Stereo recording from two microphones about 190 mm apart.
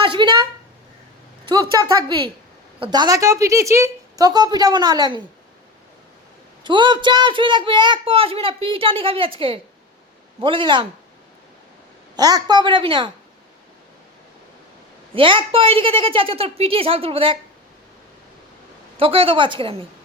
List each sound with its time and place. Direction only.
0.0 s a sound: 25° right (ahead or behind)
1.8 s a woman's voice: 25° right (ahead or behind)
6.7 s a woman's voice: 25° right (ahead or behind)
12.1 s a woman's voice: 20° right (ahead or behind)
15.1 s a woman's voice: 25° right (ahead or behind)
18.9 s a woman's voice: 30° right (ahead or behind)